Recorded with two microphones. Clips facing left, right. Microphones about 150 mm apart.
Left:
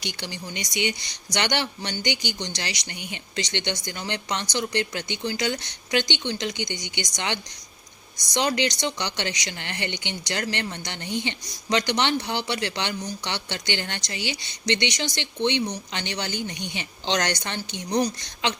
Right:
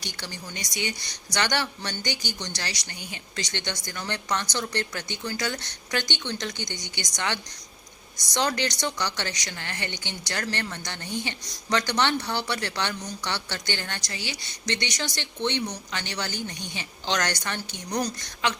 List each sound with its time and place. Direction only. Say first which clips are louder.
0.2 s a woman's voice: left 3 dB; 15° left (ahead or behind)